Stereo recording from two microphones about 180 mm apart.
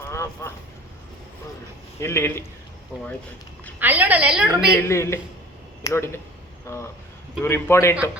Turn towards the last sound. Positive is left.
turn(degrees=15)  # may be behind; listen again after turning